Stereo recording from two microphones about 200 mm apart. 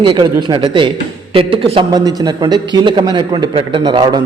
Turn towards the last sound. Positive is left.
turn(degrees=-20)  # may be behind; listen again after turning